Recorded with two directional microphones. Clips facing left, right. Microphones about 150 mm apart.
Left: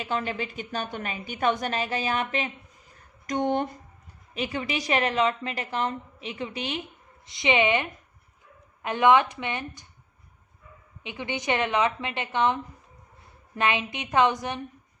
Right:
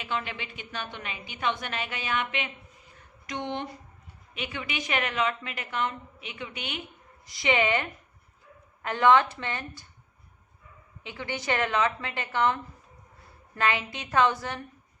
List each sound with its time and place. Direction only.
0.0 s a woman's voice: 40° left (ahead or behind)
2.9 s a sound: 45° left (ahead or behind)
4.4 s a woman's voice: 35° left (ahead or behind)
7.3 s a woman's voice: 20° left (ahead or behind)
11.0 s a woman's voice: 20° left (ahead or behind)
13.6 s a woman's voice: 20° left (ahead or behind)